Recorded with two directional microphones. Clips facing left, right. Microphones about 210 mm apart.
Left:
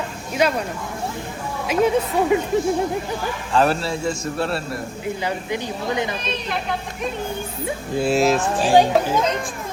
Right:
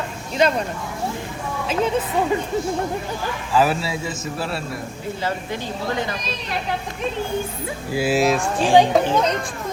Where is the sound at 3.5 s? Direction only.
Centre (ahead or behind).